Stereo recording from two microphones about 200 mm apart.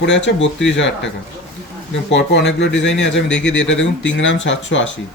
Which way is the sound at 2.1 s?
60° left (ahead or behind).